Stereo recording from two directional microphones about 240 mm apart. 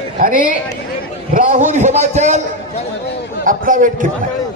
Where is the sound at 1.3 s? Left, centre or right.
Right.